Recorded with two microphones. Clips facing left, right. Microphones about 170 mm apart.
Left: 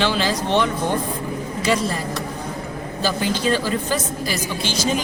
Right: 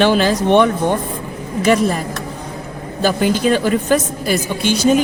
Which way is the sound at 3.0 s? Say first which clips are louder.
Right 7 dB; 55° right (ahead or behind).